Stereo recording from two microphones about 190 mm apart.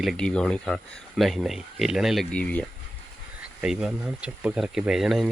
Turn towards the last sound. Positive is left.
turn(degrees=0)  # may be behind; listen again after turning